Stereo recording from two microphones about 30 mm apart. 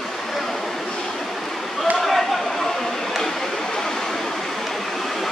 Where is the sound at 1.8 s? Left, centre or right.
Centre.